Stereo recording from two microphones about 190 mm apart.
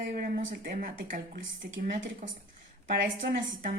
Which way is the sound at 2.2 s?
40° right (ahead or behind).